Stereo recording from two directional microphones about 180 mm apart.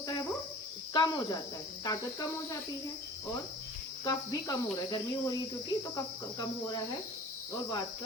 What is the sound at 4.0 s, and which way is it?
Cricket, 20° left (ahead or behind).